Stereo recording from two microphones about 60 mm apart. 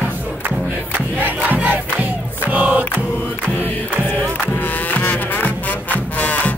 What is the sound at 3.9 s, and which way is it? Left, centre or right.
Music, right.